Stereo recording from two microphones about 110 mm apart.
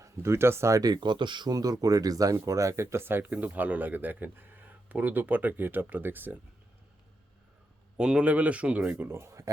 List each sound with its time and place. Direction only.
0.0 s speech: 25° right (ahead or behind)
7.9 s speech: 10° right (ahead or behind); by 9.5 s 25° right (ahead or behind)